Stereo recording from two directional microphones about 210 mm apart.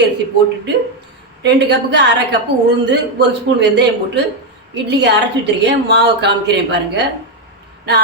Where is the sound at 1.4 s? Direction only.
55° right (ahead or behind).